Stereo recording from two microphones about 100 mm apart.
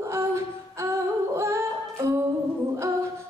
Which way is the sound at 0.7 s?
30° right (ahead or behind).